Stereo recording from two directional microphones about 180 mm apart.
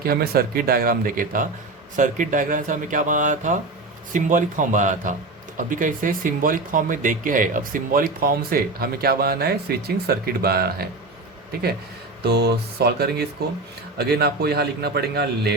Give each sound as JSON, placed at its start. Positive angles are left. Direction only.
{"t": 0.0, "sound": "a man's voice", "side_deg": -55}
{"t": 12.2, "sound": "a man's voice", "side_deg": -65}